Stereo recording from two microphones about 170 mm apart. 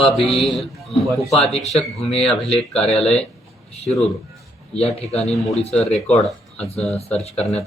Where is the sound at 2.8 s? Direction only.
35° left (ahead or behind).